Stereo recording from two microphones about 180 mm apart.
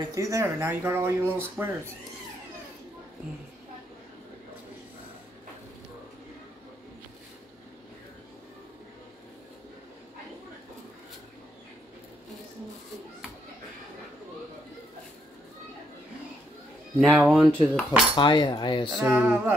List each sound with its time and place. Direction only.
0.1 s speech: 15° right (ahead or behind)
17.3 s speech: 5° left (ahead or behind)
18.1 s cutlery: 25° left (ahead or behind)
18.9 s speech: 10° right (ahead or behind)